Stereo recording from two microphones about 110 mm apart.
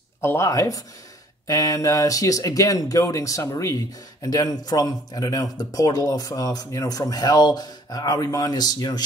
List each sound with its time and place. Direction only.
0.2 s speech: 25° left (ahead or behind)